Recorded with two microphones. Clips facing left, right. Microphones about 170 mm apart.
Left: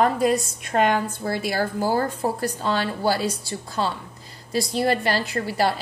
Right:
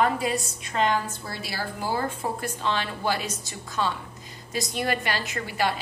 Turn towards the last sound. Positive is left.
turn(degrees=35)  # may be behind; listen again after turning